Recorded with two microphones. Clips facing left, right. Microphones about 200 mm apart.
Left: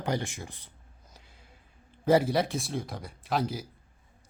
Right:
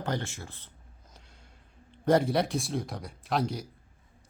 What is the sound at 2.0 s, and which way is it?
A man's voice, 5° left (ahead or behind).